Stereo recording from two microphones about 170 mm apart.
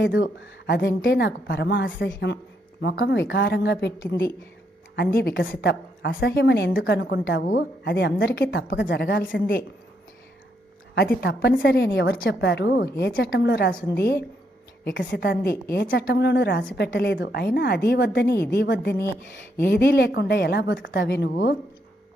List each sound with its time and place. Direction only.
0.0 s a woman's voice: 90° left
0.7 s a woman's voice: 70° left (ahead or behind); by 4.1 s 90° left
4.9 s a woman's voice: 70° left (ahead or behind); by 9.6 s 90° left
10.9 s a woman's voice: 65° left (ahead or behind)
15.7 s a woman's voice: 85° left